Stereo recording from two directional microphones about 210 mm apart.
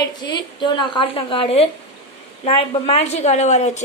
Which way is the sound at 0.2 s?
20° left (ahead or behind).